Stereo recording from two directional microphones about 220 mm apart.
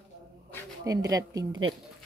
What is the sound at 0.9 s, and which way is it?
Speech, 15° right (ahead or behind).